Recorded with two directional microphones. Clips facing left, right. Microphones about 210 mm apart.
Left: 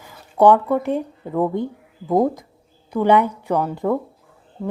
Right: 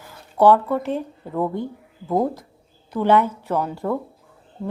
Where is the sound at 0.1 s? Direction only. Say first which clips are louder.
Left 1 dB; 15° left (ahead or behind).